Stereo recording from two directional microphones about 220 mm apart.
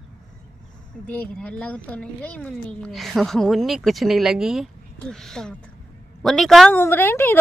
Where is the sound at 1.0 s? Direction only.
5° left (ahead or behind).